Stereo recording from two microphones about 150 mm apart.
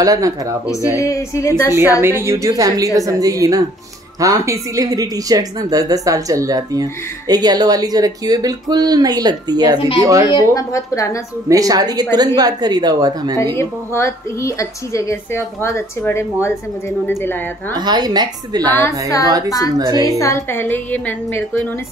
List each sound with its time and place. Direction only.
0.0 s speech: 25° right (ahead or behind)
0.9 s a woman's voice: 20° left (ahead or behind)
2.0 s speech: 15° right (ahead or behind)
9.8 s a woman's voice: 35° left (ahead or behind)
10.5 s a woman's voice: 20° left (ahead or behind)
11.4 s speech: 25° right (ahead or behind)
13.6 s a woman's voice: 15° left (ahead or behind)
17.7 s speech: 30° right (ahead or behind)
18.8 s a woman's voice: 20° left (ahead or behind)
19.2 s speech: 25° right (ahead or behind)
20.1 s a woman's voice: 20° left (ahead or behind)